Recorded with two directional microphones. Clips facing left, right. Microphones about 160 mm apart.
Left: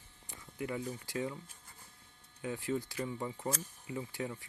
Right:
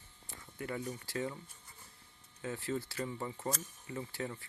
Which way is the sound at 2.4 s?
15° left (ahead or behind).